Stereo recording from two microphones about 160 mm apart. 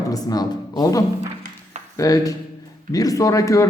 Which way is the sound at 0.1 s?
25° left (ahead or behind).